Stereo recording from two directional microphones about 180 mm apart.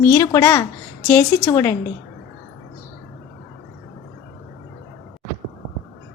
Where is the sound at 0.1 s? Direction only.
15° left (ahead or behind).